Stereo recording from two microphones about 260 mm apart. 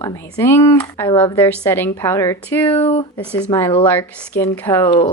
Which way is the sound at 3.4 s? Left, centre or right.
Centre.